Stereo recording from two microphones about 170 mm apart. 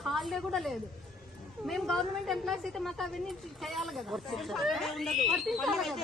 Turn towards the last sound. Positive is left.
turn(degrees=0)  # may be behind; listen again after turning